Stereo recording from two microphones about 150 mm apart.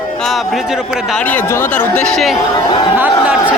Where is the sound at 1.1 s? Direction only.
10° left (ahead or behind).